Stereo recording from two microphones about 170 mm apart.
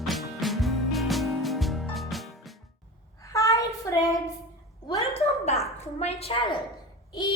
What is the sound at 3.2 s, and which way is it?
Child singing, 20° left (ahead or behind).